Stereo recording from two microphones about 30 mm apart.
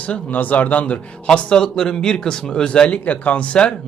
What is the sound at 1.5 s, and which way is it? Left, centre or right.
Speech, left.